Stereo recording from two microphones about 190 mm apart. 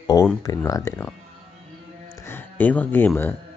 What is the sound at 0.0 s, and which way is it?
Speech, 20° left (ahead or behind).